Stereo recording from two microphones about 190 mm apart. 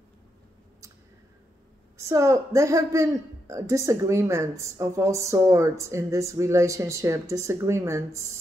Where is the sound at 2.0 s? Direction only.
15° right (ahead or behind).